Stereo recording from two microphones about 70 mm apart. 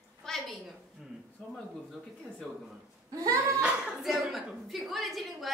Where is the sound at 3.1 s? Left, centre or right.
Right.